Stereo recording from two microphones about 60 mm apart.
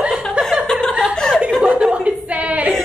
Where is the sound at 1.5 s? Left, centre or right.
Centre; by 2.7 s right.